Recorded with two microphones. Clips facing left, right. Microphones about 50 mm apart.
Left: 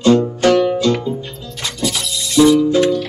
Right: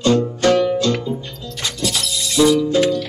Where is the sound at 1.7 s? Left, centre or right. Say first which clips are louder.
Left 2 dB; centre.